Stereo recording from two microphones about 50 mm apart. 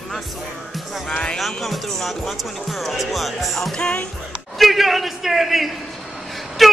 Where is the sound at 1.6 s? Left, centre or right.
Centre.